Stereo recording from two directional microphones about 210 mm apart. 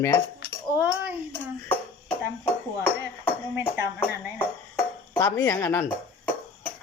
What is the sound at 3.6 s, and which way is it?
Speech, 10° right (ahead or behind).